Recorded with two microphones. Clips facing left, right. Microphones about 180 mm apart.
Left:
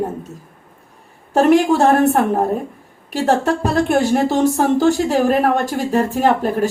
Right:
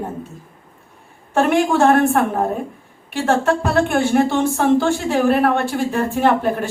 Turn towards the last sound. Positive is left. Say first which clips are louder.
# left 1 dB
turn(degrees=40)  # may be behind; listen again after turning